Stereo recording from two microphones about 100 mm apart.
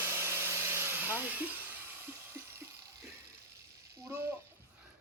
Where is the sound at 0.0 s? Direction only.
25° right (ahead or behind).